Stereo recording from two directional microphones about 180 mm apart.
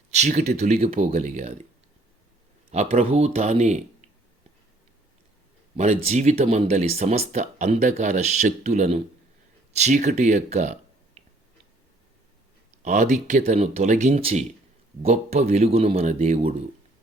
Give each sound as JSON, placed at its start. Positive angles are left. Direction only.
{"t": 0.1, "sound": "speech", "side_deg": -40}
{"t": 2.7, "sound": "speech", "side_deg": -35}
{"t": 5.7, "sound": "speech", "side_deg": -40}
{"t": 12.8, "sound": "speech", "side_deg": -40}